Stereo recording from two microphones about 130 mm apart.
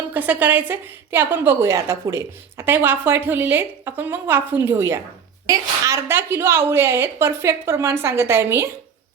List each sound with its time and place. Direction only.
0.1 s a woman's voice: 15° right (ahead or behind)